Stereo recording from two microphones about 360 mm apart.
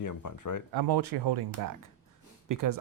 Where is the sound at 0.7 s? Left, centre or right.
Right.